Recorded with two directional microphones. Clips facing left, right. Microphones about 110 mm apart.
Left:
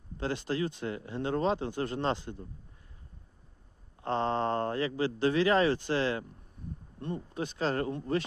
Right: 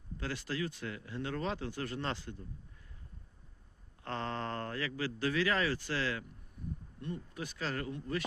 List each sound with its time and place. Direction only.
0.2 s speech: 25° left (ahead or behind)
4.0 s speech: 25° left (ahead or behind)